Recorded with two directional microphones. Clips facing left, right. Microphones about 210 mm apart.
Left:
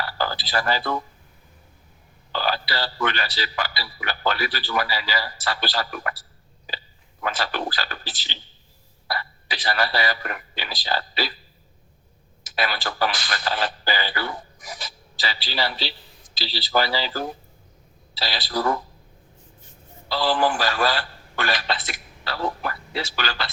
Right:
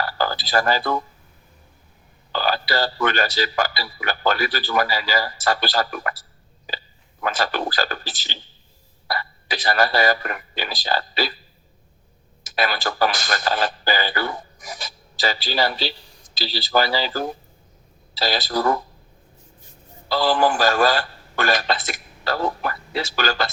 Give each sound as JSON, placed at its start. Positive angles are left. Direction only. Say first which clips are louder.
{"t": 0.0, "sound": "speech", "louder": "right 3 dB", "side_deg": -45}
{"t": 2.3, "sound": "speech", "louder": "right 3 dB", "side_deg": -45}
{"t": 6.7, "sound": "a sound", "louder": "right 3 dB", "side_deg": -45}
{"t": 7.2, "sound": "speech", "louder": "right 3 dB", "side_deg": -45}
{"t": 12.4, "sound": "speech", "louder": "right 3 dB", "side_deg": -45}
{"t": 20.1, "sound": "speech", "louder": "right 3 dB", "side_deg": -45}